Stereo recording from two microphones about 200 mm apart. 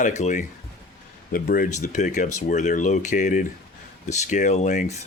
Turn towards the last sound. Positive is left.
turn(degrees=35)  # may be behind; listen again after turning